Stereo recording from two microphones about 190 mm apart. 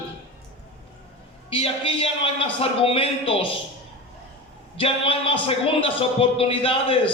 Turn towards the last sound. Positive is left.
turn(degrees=30)  # may be behind; listen again after turning